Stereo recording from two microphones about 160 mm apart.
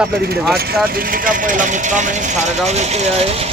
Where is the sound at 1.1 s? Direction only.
60° right (ahead or behind); by 3.2 s 45° right (ahead or behind).